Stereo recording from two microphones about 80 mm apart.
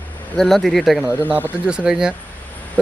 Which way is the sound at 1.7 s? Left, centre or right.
Centre.